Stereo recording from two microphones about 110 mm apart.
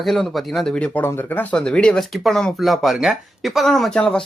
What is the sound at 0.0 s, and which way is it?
Speech, centre (ahead or behind).